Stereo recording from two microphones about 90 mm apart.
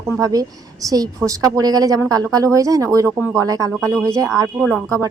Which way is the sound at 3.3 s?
40° right (ahead or behind).